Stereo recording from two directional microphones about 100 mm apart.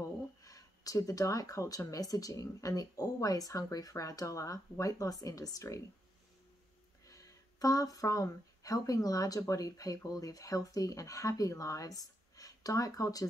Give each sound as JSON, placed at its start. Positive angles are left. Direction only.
{"t": 0.4, "sound": "speech", "side_deg": 35}
{"t": 7.1, "sound": "speech", "side_deg": 35}